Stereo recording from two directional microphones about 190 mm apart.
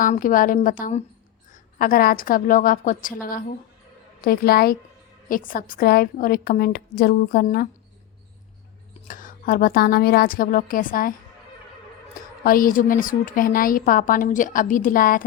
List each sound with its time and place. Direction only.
0.0 s a woman's voice: 45° left (ahead or behind)
9.0 s a woman's voice: 45° left (ahead or behind)
12.4 s a woman's voice: 45° left (ahead or behind)